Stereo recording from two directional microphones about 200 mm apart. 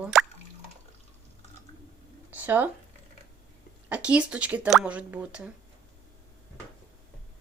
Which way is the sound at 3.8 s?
5° right (ahead or behind).